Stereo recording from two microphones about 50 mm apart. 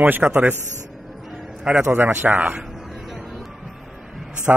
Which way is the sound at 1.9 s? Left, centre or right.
Right.